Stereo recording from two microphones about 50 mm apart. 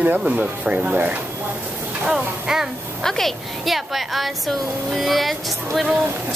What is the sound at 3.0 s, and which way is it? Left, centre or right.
A woman's voice, centre.